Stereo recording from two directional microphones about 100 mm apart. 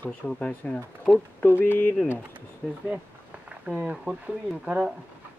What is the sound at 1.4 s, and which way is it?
Speech, 20° left (ahead or behind).